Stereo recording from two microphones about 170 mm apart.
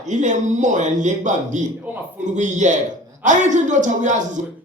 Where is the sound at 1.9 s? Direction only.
10° right (ahead or behind).